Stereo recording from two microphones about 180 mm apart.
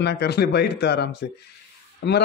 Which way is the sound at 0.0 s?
65° left (ahead or behind).